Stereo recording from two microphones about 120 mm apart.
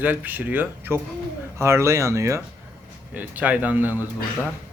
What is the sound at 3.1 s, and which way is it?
Speech, 10° right (ahead or behind).